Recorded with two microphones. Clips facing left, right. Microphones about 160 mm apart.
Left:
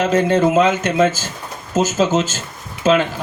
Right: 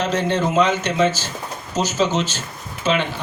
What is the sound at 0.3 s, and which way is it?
A man's voice, 50° left (ahead or behind).